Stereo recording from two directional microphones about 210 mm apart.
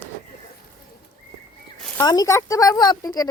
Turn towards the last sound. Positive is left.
turn(degrees=15)  # may be behind; listen again after turning